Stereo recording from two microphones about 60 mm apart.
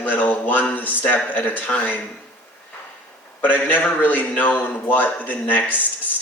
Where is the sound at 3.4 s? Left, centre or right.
Left.